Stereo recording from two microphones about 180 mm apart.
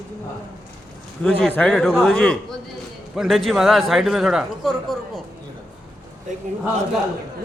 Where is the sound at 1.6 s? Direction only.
5° left (ahead or behind).